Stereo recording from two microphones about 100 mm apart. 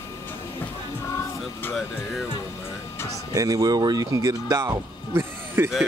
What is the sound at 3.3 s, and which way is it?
Speech, 35° right (ahead or behind).